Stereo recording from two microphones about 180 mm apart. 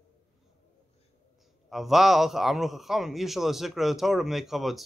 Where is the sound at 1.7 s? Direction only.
Centre (ahead or behind).